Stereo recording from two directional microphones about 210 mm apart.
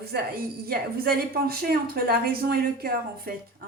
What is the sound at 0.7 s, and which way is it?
Speech, 45° right (ahead or behind).